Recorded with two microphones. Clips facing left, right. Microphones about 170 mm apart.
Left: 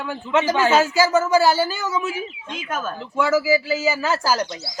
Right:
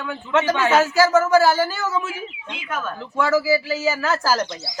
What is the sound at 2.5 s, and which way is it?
Speech, 45° left (ahead or behind).